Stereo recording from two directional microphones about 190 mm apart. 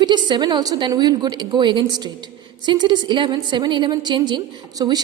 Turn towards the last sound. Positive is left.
turn(degrees=-20)  # may be behind; listen again after turning